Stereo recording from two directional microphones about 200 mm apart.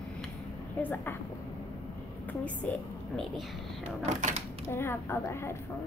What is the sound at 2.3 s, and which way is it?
Speech, 10° left (ahead or behind).